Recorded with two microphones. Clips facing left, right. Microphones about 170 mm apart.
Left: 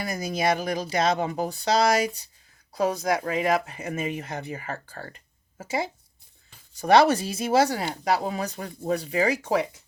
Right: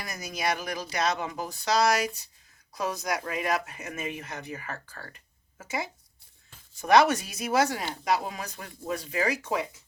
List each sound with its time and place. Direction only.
0.0 s speech: 30° left (ahead or behind)